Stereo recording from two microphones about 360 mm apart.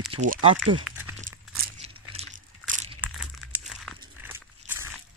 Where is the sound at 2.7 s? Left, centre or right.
Centre.